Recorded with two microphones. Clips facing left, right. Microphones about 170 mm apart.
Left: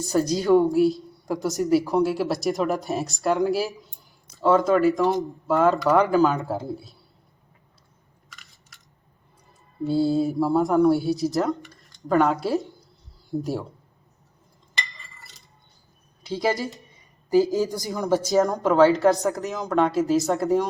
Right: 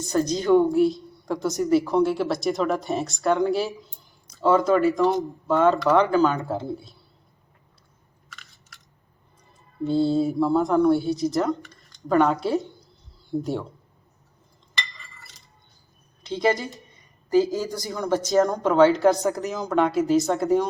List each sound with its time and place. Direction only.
0.0 s speech: 5° left (ahead or behind)
10.0 s speech: centre (ahead or behind)
16.2 s speech: centre (ahead or behind)
17.5 s speech: 20° left (ahead or behind)
17.9 s speech: centre (ahead or behind)